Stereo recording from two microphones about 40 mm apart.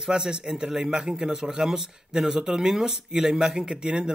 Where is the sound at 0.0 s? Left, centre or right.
Centre.